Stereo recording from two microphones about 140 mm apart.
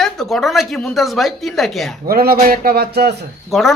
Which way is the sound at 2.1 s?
90° right.